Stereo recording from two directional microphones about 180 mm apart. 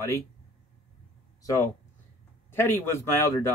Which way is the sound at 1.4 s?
20° left (ahead or behind).